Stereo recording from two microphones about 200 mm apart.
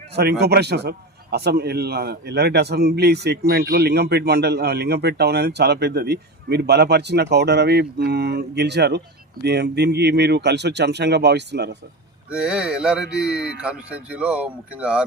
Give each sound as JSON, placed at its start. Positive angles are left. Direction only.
{"t": 0.2, "sound": "a man's voice", "side_deg": -55}
{"t": 12.3, "sound": "speech", "side_deg": -5}